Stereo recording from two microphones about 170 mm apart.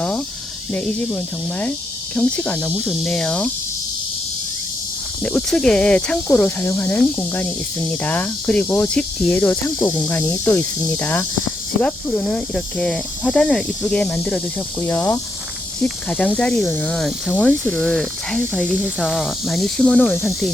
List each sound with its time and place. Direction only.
0.7 s speech: 10° left (ahead or behind)
5.2 s speech: 5° left (ahead or behind)